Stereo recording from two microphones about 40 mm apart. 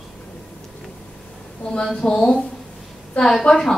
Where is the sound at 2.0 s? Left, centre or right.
Centre.